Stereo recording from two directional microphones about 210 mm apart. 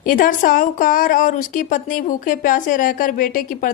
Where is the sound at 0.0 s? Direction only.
40° left (ahead or behind).